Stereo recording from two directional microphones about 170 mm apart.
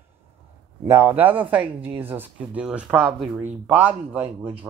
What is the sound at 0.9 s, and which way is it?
Speech, 15° right (ahead or behind).